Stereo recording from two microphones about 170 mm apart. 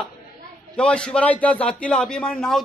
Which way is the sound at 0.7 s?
5° left (ahead or behind).